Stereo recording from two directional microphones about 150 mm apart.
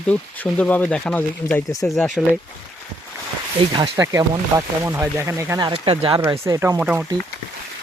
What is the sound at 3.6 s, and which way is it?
Speech, 35° right (ahead or behind).